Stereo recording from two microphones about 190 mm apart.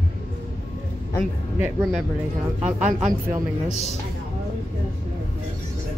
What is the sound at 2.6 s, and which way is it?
Speech, 35° right (ahead or behind).